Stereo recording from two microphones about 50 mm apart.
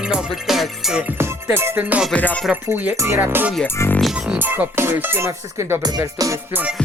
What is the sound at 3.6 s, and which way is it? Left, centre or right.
Speech, left.